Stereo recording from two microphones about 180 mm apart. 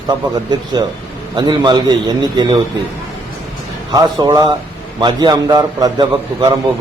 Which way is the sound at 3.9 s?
20° right (ahead or behind).